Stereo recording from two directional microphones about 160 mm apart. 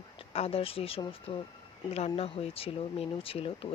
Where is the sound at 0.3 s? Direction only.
40° left (ahead or behind).